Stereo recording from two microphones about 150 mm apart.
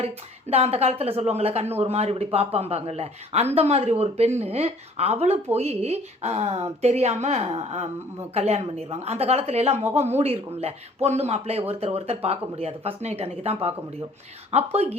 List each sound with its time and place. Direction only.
0.0 s a woman's voice: 45° right (ahead or behind)